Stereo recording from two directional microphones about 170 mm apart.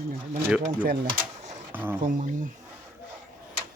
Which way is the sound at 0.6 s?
55° right (ahead or behind).